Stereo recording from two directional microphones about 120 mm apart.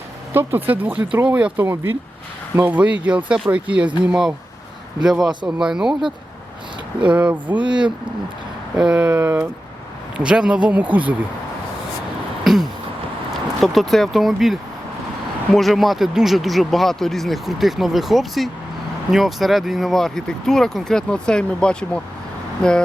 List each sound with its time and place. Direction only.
0.3 s speech: 15° right (ahead or behind)
8.7 s speech: 5° right (ahead or behind)
12.5 s a sound: 5° right (ahead or behind)
13.6 s speech: centre (ahead or behind)